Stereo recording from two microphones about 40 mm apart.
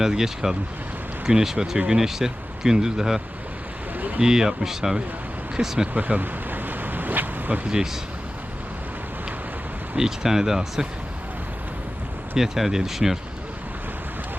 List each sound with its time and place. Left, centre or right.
0.0 s speech: centre
4.2 s speech: centre
5.9 s a sound: right
10.0 s speech: centre
12.4 s speech: centre